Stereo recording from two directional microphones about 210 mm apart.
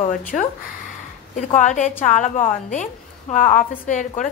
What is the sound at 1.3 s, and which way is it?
A woman's voice, 40° left (ahead or behind).